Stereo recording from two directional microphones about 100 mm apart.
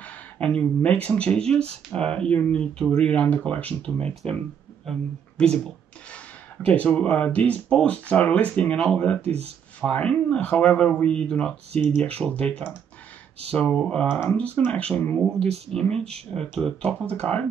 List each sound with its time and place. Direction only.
0.0 s speech: 10° left (ahead or behind)
5.4 s speech: 10° left (ahead or behind)
13.6 s speech: 10° left (ahead or behind)